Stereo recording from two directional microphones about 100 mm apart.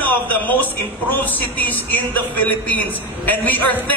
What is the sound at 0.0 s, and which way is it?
A man's voice, 15° left (ahead or behind).